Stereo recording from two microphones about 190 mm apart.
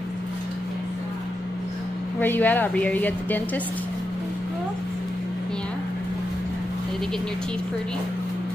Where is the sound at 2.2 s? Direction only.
10° left (ahead or behind).